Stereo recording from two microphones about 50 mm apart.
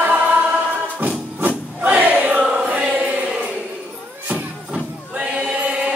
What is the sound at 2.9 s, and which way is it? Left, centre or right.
Chant, right.